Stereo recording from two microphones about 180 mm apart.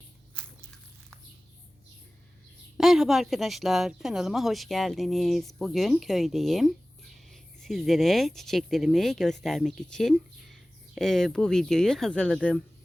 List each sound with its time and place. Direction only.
0.3 s walk: 5° left (ahead or behind)
2.7 s speech: centre (ahead or behind)